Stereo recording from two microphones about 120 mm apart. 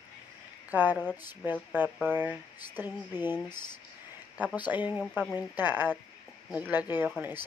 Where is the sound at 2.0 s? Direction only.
15° right (ahead or behind).